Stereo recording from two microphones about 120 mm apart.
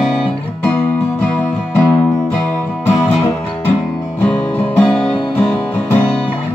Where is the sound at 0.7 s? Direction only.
15° left (ahead or behind).